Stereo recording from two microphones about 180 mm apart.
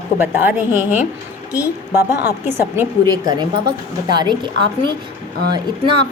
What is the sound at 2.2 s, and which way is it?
A woman's voice, 15° right (ahead or behind).